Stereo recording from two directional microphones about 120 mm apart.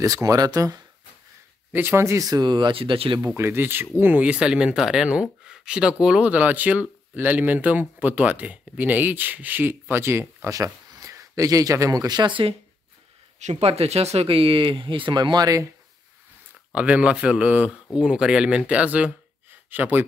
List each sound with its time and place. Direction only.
0.0 s speech: 30° right (ahead or behind)
1.7 s speech: 20° right (ahead or behind); by 3.2 s 45° right (ahead or behind)
3.3 s speech: 20° right (ahead or behind)
13.4 s speech: 65° right (ahead or behind); by 15.7 s 30° right (ahead or behind)
16.7 s a man's voice: 10° right (ahead or behind)